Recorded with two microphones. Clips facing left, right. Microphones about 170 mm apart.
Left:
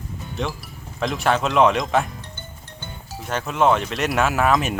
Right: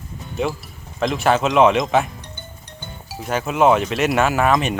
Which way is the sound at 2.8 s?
10° right (ahead or behind).